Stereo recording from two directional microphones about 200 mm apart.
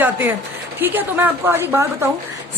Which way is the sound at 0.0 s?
10° right (ahead or behind).